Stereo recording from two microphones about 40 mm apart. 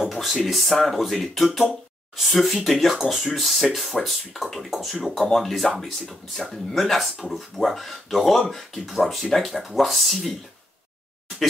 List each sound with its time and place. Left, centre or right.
0.1 s speech: centre